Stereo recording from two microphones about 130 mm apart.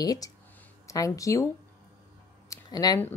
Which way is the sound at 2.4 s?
30° left (ahead or behind).